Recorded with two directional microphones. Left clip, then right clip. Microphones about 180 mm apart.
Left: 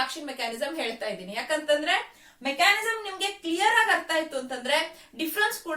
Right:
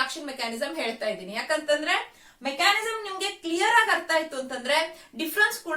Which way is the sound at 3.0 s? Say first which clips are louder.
Even; 15° right (ahead or behind).